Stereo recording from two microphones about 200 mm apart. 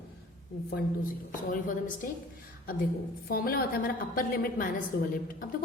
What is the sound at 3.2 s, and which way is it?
A woman's voice, 50° left (ahead or behind).